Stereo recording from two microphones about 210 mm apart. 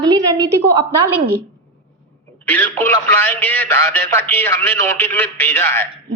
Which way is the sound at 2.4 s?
10° left (ahead or behind).